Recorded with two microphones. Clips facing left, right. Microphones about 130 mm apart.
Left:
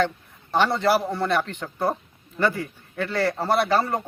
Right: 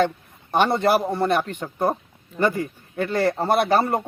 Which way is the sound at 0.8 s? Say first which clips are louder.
Right 2 dB; 50° right (ahead or behind).